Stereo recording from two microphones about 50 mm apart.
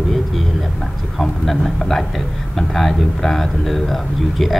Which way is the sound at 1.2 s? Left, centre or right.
Centre.